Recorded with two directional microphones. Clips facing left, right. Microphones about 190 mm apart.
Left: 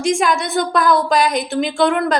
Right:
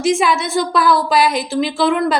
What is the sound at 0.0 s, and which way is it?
A woman's voice, 5° right (ahead or behind).